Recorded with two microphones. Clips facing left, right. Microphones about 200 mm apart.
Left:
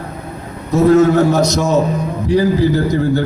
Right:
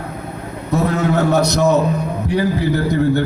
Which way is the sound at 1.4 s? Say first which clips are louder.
Even; 60° right (ahead or behind).